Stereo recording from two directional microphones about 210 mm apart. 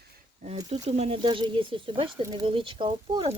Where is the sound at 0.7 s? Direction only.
30° right (ahead or behind).